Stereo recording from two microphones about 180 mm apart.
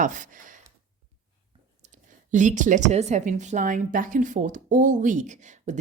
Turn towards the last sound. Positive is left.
turn(degrees=-40)  # may be behind; listen again after turning